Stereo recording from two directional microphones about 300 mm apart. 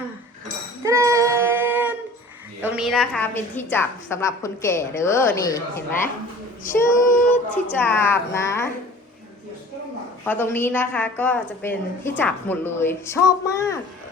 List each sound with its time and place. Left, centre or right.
0.9 s a sound: centre
2.6 s a woman's voice: centre
10.2 s a woman's voice: centre